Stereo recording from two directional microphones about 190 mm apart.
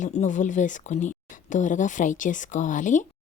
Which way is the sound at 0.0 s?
40° left (ahead or behind).